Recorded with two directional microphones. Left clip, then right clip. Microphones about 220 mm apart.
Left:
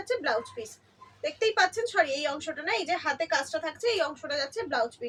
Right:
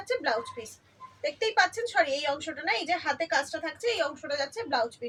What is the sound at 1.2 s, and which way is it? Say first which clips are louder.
A woman's voice: even; 10° left (ahead or behind).